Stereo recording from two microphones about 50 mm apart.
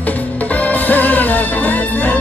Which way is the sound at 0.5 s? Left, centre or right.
Left.